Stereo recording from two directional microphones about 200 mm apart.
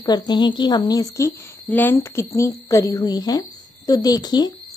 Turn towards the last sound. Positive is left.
turn(degrees=20)  # may be behind; listen again after turning